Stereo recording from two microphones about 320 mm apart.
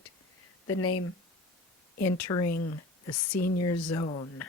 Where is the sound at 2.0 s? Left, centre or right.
Left.